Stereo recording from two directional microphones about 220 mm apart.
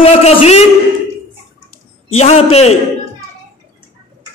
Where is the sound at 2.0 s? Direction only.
30° left (ahead or behind).